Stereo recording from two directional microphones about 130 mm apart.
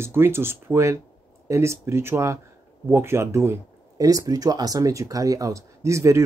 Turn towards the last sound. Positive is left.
turn(degrees=-20)  # may be behind; listen again after turning